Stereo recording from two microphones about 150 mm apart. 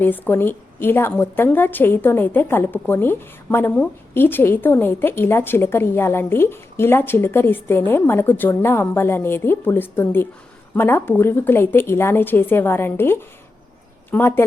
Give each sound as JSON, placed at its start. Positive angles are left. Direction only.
{"t": 0.0, "sound": "a woman's voice", "side_deg": 15}